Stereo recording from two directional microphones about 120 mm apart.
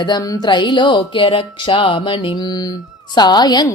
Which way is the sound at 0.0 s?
35° left (ahead or behind).